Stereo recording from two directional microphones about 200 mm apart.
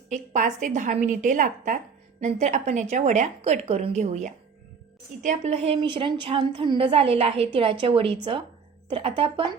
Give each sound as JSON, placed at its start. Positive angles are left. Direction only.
{"t": 0.1, "sound": "a woman's voice", "side_deg": -35}